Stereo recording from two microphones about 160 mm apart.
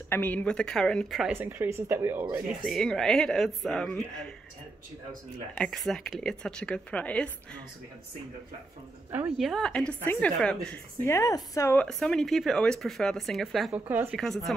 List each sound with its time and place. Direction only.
0.1 s speech: 10° left (ahead or behind); by 2.2 s 15° right (ahead or behind)
2.6 s speech: centre (ahead or behind)
5.5 s speech: 5° left (ahead or behind)
9.1 s a woman's voice: 10° right (ahead or behind)
9.5 s speech: 5° left (ahead or behind)
11.1 s speech: 20° left (ahead or behind); by 13.7 s centre (ahead or behind)
13.7 s a woman's voice: 10° right (ahead or behind)
14.1 s speech: centre (ahead or behind)